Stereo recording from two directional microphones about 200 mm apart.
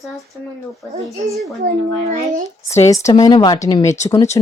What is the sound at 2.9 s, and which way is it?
Speech, 15° left (ahead or behind).